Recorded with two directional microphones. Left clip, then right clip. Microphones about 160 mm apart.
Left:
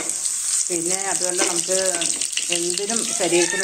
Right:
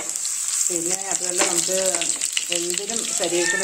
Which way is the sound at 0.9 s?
Centre (ahead or behind).